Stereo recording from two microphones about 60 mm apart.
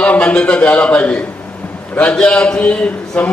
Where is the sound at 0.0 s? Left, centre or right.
Left.